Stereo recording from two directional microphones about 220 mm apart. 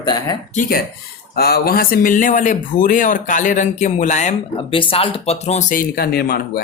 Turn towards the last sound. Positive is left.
turn(degrees=45)  # may be behind; listen again after turning